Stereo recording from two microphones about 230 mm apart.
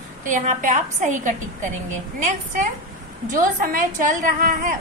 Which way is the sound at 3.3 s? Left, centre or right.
Right.